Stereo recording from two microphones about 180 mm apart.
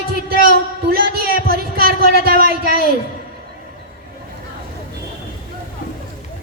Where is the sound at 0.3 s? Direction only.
55° right (ahead or behind).